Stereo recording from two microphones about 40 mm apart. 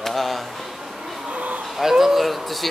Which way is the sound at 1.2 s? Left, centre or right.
Right.